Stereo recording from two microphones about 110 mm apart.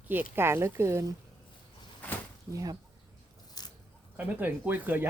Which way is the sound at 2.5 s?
35° right (ahead or behind).